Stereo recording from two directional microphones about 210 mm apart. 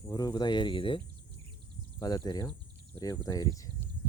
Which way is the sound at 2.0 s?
20° left (ahead or behind).